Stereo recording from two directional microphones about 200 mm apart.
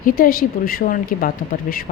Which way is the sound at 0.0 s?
45° left (ahead or behind).